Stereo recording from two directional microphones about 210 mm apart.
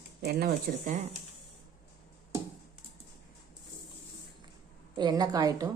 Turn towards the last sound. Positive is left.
turn(degrees=-20)  # may be behind; listen again after turning